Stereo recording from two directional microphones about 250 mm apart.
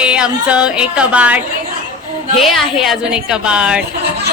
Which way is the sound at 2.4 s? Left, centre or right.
Centre.